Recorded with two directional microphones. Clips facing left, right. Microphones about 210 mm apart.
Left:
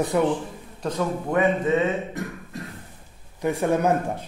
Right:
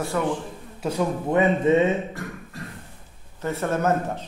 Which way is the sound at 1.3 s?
25° right (ahead or behind).